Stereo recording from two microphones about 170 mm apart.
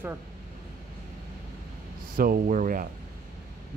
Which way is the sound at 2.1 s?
55° right (ahead or behind).